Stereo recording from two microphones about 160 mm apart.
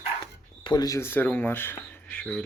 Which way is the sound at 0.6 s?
25° left (ahead or behind).